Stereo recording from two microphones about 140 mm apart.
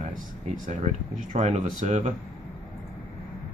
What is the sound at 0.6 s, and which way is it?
Speech, 60° right (ahead or behind).